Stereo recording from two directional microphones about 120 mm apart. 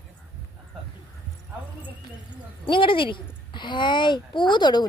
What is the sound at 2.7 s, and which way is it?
Speech, 45° left (ahead or behind).